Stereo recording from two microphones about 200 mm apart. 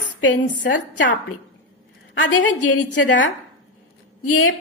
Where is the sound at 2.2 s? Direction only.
80° left.